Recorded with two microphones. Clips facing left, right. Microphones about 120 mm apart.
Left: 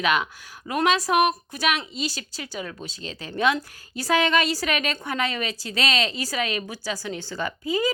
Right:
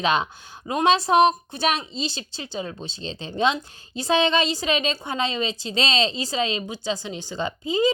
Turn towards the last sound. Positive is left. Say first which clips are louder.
# right 3 dB
turn(degrees=-20)  # may be behind; listen again after turning